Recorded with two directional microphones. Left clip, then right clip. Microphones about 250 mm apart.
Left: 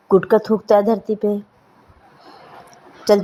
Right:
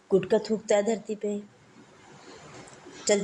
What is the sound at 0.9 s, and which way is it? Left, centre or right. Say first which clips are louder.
Speech: left 11 dB; left.